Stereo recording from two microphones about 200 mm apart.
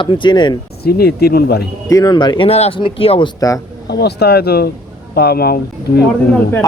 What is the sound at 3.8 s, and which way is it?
Speech, 55° left (ahead or behind).